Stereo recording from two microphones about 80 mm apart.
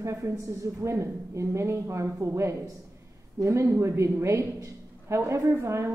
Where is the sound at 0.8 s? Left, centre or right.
Right.